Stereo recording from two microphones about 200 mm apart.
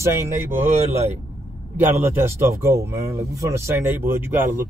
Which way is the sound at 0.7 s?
30° right (ahead or behind).